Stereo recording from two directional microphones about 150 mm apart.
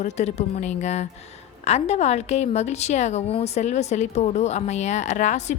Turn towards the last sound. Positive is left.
turn(degrees=50)  # may be behind; listen again after turning